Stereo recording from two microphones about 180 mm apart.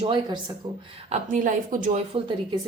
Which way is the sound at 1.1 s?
45° right (ahead or behind).